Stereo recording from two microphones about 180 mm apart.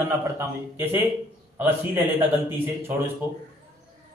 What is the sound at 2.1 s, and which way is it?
Speech, 10° right (ahead or behind).